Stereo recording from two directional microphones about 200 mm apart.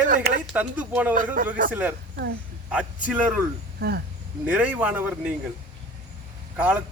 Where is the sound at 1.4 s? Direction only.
45° right (ahead or behind).